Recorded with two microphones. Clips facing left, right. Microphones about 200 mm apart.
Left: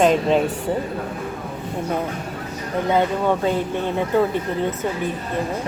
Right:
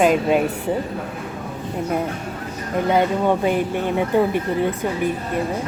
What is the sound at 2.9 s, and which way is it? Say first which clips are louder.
Speech: right 1 dB; 15° right (ahead or behind).